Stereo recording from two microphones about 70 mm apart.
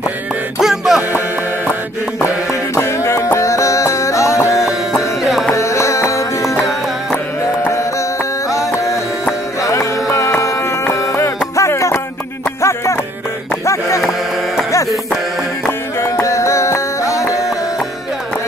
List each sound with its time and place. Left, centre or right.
0.6 s music: centre
2.2 s music: left
5.2 s music: centre
5.5 s music: left
7.7 s music: left
13.7 s a sound: left
16.0 s music: left